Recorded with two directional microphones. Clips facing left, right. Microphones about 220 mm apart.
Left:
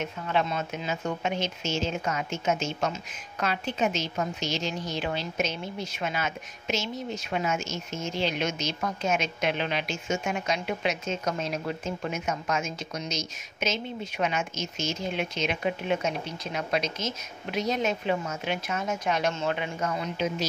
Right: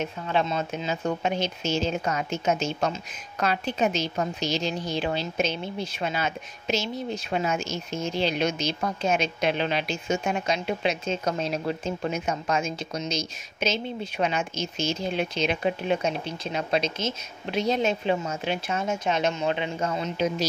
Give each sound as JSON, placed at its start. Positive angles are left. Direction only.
{"t": 0.0, "sound": "speech", "side_deg": -30}